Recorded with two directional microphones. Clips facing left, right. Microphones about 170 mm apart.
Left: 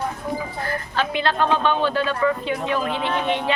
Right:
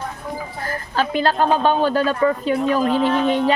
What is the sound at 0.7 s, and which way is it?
A woman's voice, 40° right (ahead or behind).